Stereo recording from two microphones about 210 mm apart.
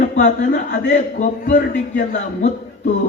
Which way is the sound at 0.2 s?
35° left (ahead or behind).